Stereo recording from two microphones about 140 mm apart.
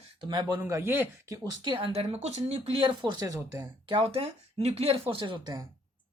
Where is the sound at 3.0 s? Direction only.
30° right (ahead or behind).